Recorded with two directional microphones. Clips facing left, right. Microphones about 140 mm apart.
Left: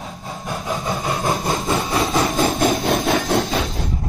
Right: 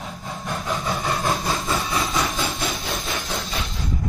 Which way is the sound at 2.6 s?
55° left (ahead or behind).